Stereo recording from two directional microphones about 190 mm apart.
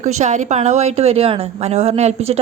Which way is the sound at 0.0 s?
40° right (ahead or behind).